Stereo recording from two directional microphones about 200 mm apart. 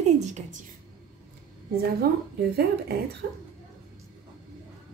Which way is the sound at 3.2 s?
50° right (ahead or behind).